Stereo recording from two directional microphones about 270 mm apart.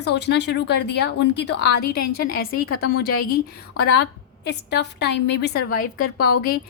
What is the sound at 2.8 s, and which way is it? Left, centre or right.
A woman's voice, left.